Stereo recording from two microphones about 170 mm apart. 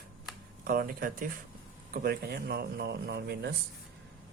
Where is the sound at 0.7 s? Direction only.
55° right (ahead or behind); by 3.6 s 75° right (ahead or behind).